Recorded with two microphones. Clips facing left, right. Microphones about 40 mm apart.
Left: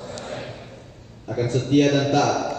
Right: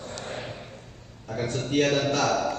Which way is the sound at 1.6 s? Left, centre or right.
Centre.